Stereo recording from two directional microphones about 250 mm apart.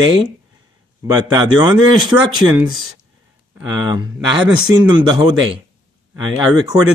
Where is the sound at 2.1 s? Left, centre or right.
Centre.